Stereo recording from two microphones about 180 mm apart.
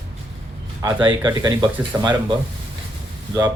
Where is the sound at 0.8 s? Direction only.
25° right (ahead or behind).